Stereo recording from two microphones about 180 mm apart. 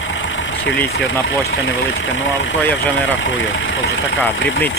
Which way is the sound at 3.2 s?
90° left.